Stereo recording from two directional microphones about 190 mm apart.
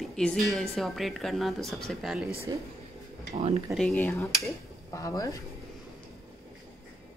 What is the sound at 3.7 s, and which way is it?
Speech, 10° left (ahead or behind).